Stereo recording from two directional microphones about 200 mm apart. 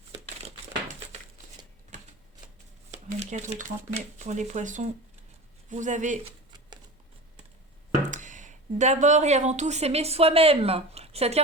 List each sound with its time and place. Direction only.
2.9 s speech: 35° right (ahead or behind)
8.1 s speech: 40° right (ahead or behind)